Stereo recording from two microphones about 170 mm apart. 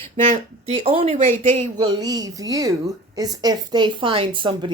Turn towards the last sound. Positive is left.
turn(degrees=-30)  # may be behind; listen again after turning